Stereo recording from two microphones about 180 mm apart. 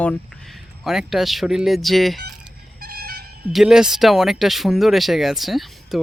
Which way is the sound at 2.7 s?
60° right (ahead or behind).